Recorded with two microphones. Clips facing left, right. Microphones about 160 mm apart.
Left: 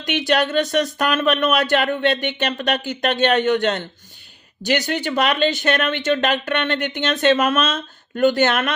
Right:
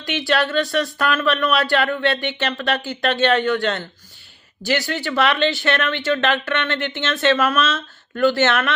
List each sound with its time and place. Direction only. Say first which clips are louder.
0.0 s speech: left 1 dB; 20° left (ahead or behind)